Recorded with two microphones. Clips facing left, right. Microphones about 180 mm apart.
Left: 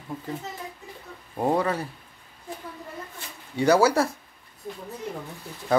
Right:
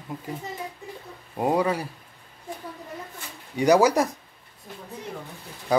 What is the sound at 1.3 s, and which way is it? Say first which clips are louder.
Speech: right 1 dB; 10° right (ahead or behind).